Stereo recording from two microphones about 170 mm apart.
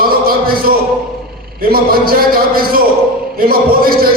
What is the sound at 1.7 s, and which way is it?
A man's voice, 60° right (ahead or behind).